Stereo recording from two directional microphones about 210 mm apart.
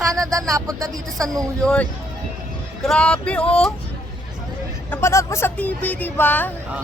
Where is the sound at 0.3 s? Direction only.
15° right (ahead or behind).